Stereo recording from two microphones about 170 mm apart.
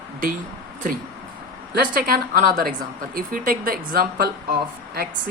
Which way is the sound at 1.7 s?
60° right (ahead or behind).